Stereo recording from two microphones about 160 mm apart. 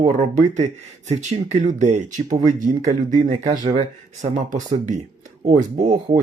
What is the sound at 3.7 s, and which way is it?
Speech, 40° right (ahead or behind).